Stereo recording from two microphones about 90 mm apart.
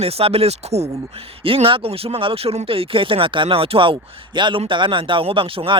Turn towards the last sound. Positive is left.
turn(degrees=-85)